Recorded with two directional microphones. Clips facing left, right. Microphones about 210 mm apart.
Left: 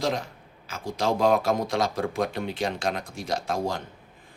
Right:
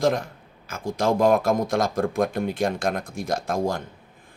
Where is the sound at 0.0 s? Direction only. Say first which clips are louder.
Right 5 dB; 50° right (ahead or behind).